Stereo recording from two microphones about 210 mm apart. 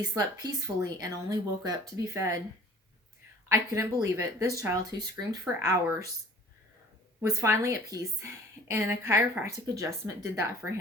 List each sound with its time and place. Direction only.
0.1 s a woman's voice: 15° right (ahead or behind)
3.5 s a woman's voice: 15° right (ahead or behind)
7.2 s a woman's voice: 15° right (ahead or behind)